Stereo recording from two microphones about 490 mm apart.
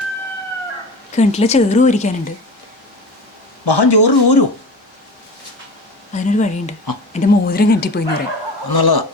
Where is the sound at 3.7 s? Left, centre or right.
Left.